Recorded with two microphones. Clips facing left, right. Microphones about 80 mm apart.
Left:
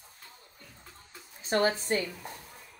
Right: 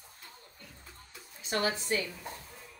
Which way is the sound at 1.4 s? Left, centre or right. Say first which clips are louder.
Left 5 dB; left.